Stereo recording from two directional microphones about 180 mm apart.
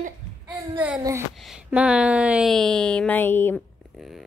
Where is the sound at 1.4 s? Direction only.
5° right (ahead or behind).